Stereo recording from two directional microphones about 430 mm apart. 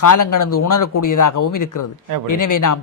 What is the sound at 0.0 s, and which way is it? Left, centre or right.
Speech, left.